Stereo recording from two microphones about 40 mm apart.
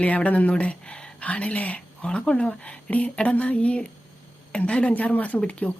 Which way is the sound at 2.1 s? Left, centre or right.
Left.